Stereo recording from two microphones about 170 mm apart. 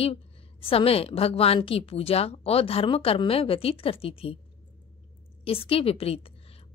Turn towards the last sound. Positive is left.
turn(degrees=35)  # may be behind; listen again after turning